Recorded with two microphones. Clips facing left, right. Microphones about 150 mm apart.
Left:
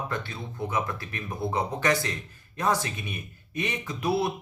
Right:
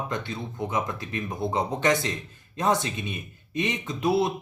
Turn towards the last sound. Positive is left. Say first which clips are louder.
# right 3 dB
turn(degrees=-20)  # may be behind; listen again after turning